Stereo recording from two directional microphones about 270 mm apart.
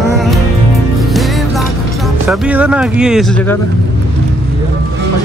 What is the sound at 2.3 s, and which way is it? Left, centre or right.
Music, centre.